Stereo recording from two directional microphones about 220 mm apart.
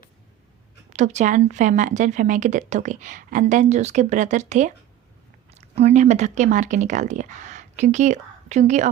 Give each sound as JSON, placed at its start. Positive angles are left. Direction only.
{"t": 0.9, "sound": "a woman's voice", "side_deg": -30}